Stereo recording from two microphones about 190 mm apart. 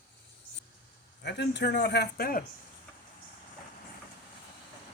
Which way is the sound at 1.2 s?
65° left (ahead or behind).